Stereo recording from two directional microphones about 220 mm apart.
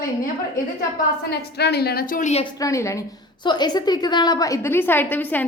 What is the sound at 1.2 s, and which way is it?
A woman's voice, 50° left (ahead or behind).